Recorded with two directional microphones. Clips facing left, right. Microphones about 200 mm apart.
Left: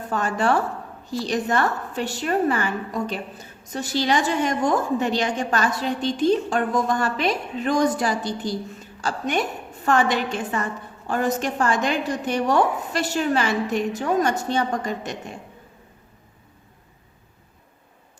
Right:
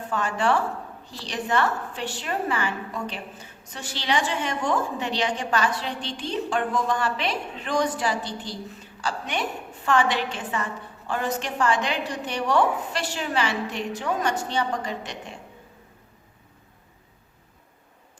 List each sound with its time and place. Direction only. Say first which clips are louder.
0.1 s a woman's voice: left 2 dB; 40° left (ahead or behind)